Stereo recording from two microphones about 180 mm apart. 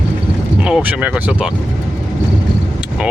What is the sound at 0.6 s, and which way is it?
Speech, 5° right (ahead or behind).